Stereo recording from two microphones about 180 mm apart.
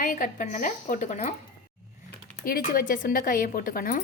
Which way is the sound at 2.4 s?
55° left (ahead or behind).